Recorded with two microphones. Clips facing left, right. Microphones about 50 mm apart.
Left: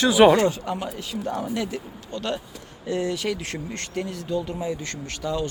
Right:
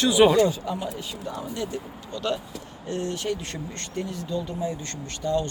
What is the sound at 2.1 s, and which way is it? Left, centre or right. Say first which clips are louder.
Speech: even; left.